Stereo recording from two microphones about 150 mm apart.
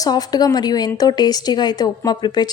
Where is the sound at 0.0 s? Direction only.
25° left (ahead or behind).